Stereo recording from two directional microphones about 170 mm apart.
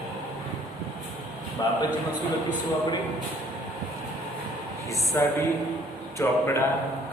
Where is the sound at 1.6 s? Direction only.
20° left (ahead or behind).